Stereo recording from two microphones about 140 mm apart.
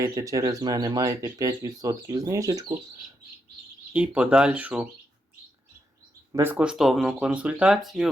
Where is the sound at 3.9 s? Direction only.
10° right (ahead or behind).